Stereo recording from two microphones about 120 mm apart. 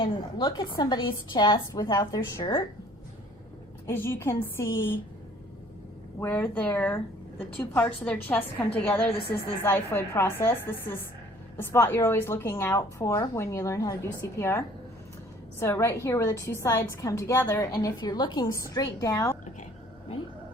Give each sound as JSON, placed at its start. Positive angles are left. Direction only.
{"t": 0.0, "sound": "a woman's voice", "side_deg": 40}
{"t": 3.8, "sound": "a woman's voice", "side_deg": 20}
{"t": 6.1, "sound": "a woman's voice", "side_deg": 15}